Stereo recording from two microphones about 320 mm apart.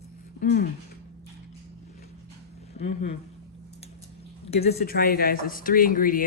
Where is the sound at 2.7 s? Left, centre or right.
Centre.